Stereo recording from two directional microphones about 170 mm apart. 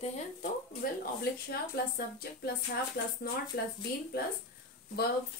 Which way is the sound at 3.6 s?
75° left (ahead or behind).